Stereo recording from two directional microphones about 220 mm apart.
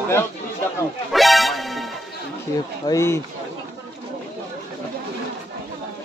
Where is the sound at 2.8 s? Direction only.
15° left (ahead or behind).